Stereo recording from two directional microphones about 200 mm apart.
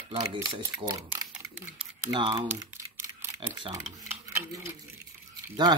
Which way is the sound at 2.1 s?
20° right (ahead or behind).